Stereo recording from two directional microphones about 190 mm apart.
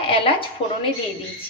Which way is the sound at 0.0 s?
30° left (ahead or behind).